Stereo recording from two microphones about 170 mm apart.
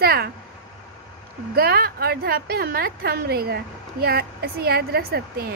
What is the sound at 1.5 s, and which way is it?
A woman's voice, 65° right (ahead or behind).